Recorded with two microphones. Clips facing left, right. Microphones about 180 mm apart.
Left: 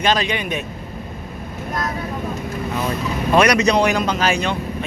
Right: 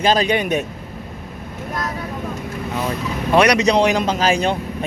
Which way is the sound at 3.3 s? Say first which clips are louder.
Right 1 dB; 20° right (ahead or behind).